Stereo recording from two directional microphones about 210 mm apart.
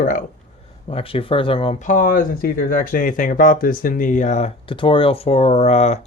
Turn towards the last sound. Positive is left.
turn(degrees=30)  # may be behind; listen again after turning